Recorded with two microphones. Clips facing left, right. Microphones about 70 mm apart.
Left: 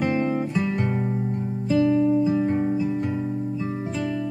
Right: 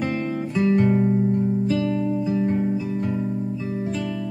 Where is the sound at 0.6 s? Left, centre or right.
Centre.